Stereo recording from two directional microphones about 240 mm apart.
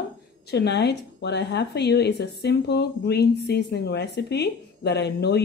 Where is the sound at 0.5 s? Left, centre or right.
Left.